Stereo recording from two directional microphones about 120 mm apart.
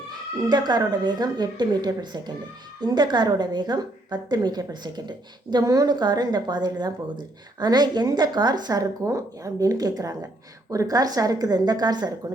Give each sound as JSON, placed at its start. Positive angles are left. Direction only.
{"t": 0.4, "sound": "a woman's voice", "side_deg": -35}